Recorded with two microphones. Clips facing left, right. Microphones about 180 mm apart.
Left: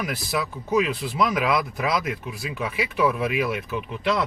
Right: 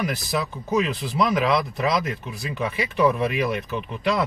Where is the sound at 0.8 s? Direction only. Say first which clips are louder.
Right 1 dB; centre (ahead or behind).